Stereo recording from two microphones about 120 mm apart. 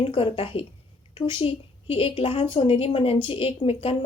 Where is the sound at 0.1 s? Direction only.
45° left (ahead or behind).